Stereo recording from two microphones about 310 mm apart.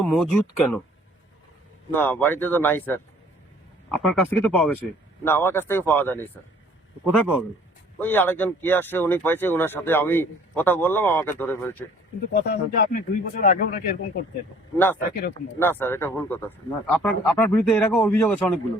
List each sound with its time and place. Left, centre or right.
0.0 s speech: centre
1.9 s speech: centre
12.3 s speech: left
14.8 s speech: centre